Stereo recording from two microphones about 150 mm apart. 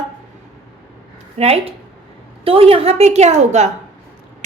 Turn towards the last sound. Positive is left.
turn(degrees=-50)  # may be behind; listen again after turning